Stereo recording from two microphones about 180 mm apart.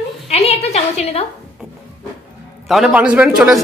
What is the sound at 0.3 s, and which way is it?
Speech, 35° left (ahead or behind).